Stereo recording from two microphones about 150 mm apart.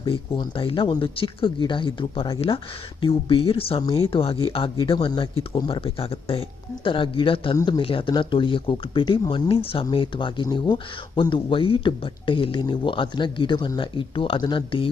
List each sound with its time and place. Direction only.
0.0 s speech: 35° left (ahead or behind)